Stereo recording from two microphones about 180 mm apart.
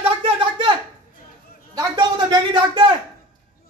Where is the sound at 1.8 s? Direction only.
25° right (ahead or behind).